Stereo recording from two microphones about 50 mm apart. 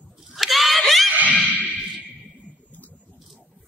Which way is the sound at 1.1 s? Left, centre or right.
Right.